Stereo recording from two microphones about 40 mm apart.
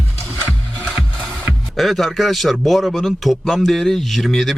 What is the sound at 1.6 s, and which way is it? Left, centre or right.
A man's voice, centre.